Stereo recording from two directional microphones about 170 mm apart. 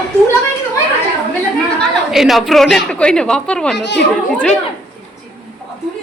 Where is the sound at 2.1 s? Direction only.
Centre (ahead or behind).